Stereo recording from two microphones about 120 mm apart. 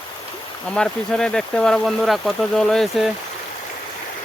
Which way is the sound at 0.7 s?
5° left (ahead or behind).